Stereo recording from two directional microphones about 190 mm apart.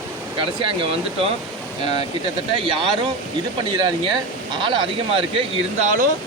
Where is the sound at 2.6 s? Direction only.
25° right (ahead or behind).